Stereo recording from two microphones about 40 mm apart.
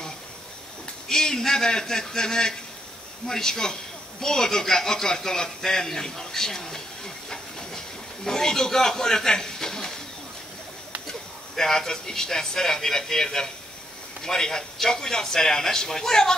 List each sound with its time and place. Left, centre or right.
1.0 s speech: centre
8.3 s a man's voice: centre
11.1 s speech: centre